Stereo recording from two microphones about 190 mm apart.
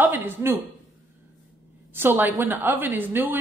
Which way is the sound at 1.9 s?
10° right (ahead or behind).